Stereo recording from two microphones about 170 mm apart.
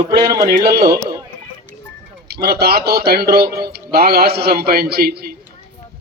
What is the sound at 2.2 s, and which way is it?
A man's voice, 70° right (ahead or behind).